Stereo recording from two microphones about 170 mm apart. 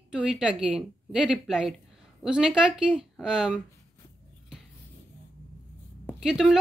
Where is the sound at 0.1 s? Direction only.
5° right (ahead or behind).